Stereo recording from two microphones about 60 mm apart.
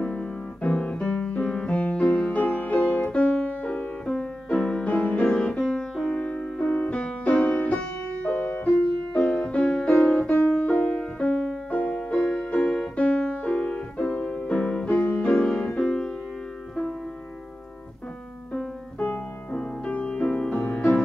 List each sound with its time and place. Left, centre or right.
0.0 s piano: centre
0.7 s music: centre
4.5 s music: centre
4.8 s music: left
6.3 s music: left
8.7 s music: centre
9.6 s piano: left
10.4 s music: left
14.9 s music: left
18.9 s music: left
19.5 s music: centre